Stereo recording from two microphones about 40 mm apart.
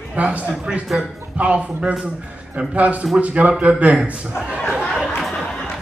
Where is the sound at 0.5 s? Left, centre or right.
Right.